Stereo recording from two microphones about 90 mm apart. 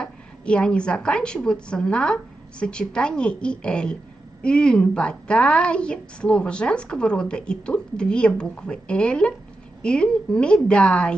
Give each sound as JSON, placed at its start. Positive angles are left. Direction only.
{"t": 0.0, "sound": "a woman's voice", "side_deg": 10}